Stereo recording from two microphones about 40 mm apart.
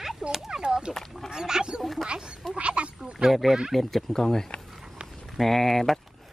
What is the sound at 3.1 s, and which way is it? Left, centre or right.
Speech, centre.